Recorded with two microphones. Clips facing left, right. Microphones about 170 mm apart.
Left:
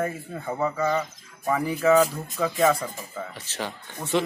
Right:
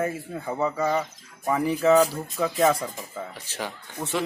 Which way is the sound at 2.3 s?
5° right (ahead or behind).